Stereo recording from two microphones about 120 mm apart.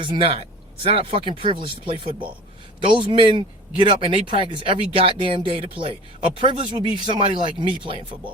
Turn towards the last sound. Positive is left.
turn(degrees=-45)  # may be behind; listen again after turning